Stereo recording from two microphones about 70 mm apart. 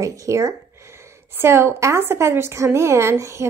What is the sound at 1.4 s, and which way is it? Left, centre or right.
A woman's voice, right.